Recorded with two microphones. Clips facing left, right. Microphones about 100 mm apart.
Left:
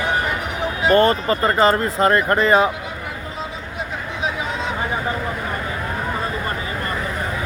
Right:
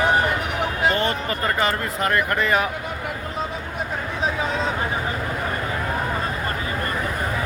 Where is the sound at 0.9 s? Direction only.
50° left (ahead or behind).